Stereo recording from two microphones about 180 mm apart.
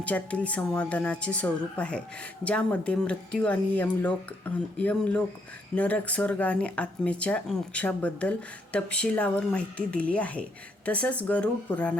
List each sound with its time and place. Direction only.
0.0 s speech: 5° left (ahead or behind)